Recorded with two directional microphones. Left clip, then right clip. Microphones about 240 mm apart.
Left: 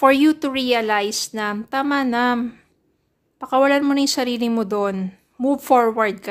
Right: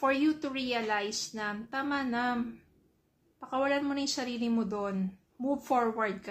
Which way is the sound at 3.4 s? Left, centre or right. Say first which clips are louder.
Left 14 dB; left.